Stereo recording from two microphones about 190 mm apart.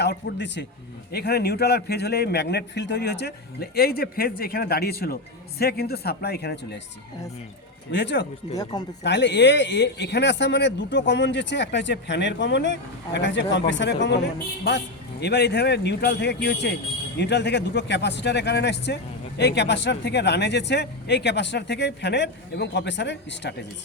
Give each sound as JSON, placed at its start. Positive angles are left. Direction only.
{"t": 0.0, "sound": "speech", "side_deg": 60}
{"t": 7.9, "sound": "speech", "side_deg": 65}
{"t": 15.2, "sound": "speech", "side_deg": 60}